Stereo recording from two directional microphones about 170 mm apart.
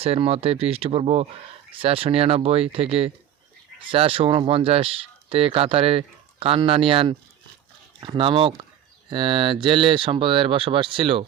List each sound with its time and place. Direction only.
0.0 s speech: 35° right (ahead or behind)